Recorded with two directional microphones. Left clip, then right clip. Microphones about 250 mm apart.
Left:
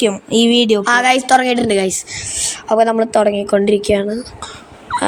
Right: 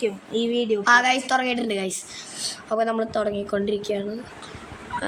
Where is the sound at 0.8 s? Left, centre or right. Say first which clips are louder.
Left 2 dB; centre.